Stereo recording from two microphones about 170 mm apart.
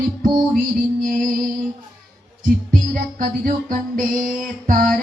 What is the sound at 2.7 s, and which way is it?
Music, 55° right (ahead or behind).